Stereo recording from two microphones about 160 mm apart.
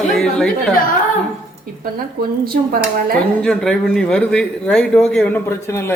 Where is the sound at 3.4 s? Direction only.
5° left (ahead or behind).